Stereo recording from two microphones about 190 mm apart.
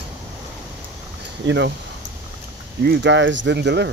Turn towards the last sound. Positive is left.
turn(degrees=-65)  # may be behind; listen again after turning